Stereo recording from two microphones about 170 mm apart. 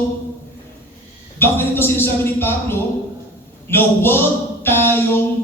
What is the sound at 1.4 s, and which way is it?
Speech, 15° left (ahead or behind).